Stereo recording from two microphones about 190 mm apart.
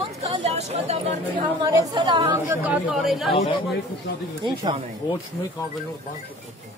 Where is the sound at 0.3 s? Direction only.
35° right (ahead or behind).